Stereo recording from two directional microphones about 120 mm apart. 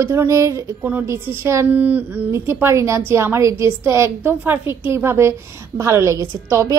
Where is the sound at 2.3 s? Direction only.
25° right (ahead or behind).